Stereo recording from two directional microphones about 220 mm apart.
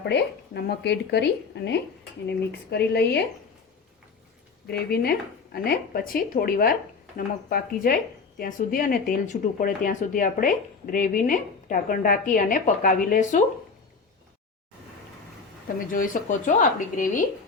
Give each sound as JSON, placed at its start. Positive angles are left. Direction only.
{"t": 0.0, "sound": "speech", "side_deg": 50}
{"t": 4.7, "sound": "a woman's voice", "side_deg": 45}
{"t": 15.9, "sound": "a woman's voice", "side_deg": 40}